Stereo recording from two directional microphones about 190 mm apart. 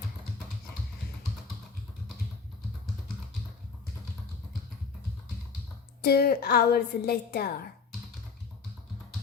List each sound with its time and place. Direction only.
6.0 s a woman's voice: 55° left (ahead or behind)